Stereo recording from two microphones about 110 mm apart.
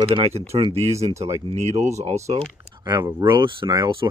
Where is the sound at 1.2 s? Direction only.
80° right.